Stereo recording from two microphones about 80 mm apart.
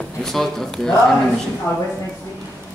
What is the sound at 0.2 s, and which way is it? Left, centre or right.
Speech, centre.